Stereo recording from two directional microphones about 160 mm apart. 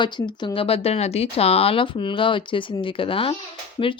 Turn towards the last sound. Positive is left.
turn(degrees=35)  # may be behind; listen again after turning